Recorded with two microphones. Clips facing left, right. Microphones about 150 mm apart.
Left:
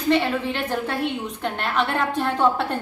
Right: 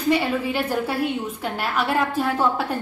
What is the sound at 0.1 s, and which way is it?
A woman's voice, 10° right (ahead or behind).